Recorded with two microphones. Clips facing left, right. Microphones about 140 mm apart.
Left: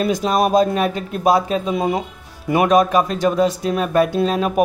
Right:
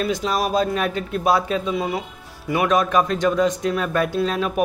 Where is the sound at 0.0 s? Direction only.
40° left (ahead or behind).